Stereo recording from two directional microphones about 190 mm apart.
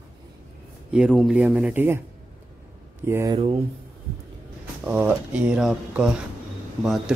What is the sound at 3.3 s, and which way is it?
Speech, 30° right (ahead or behind).